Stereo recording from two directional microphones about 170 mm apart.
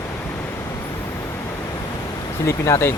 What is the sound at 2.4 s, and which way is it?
Speech, 15° left (ahead or behind).